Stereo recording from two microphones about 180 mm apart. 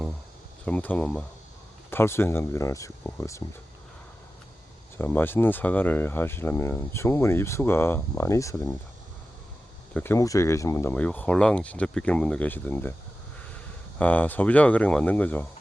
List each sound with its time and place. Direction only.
0.6 s speech: 10° left (ahead or behind)
4.9 s speech: 10° left (ahead or behind)
9.9 s speech: 15° left (ahead or behind)
14.0 s speech: 10° left (ahead or behind)